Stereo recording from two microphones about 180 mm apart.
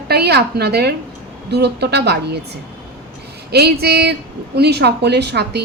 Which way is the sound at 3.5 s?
65° right (ahead or behind).